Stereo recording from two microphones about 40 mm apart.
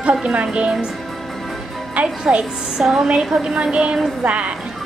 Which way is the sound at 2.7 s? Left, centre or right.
Centre.